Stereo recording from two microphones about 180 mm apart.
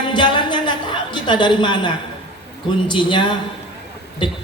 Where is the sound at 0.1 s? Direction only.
25° left (ahead or behind).